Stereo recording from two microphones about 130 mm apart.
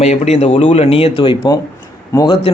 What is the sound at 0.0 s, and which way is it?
Speech, 60° left (ahead or behind).